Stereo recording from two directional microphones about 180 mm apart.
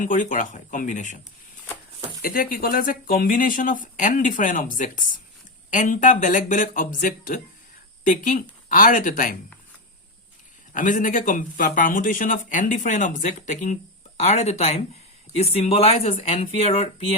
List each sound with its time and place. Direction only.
0.0 s speech: 45° left (ahead or behind)
2.2 s speech: 50° left (ahead or behind)
10.7 s speech: 45° left (ahead or behind)